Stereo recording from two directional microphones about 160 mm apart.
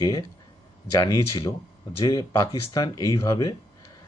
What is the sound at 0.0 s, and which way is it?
Speech, 20° left (ahead or behind).